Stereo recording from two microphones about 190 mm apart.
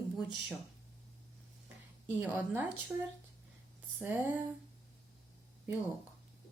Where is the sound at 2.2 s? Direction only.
5° right (ahead or behind).